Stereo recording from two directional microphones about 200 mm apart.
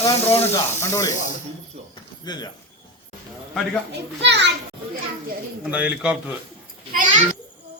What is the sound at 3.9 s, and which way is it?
Speech, 60° right (ahead or behind).